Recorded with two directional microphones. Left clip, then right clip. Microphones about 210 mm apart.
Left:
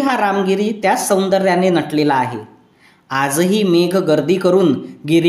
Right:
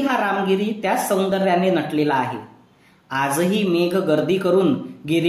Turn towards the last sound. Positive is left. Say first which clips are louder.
# left 6 dB
turn(degrees=45)  # may be behind; listen again after turning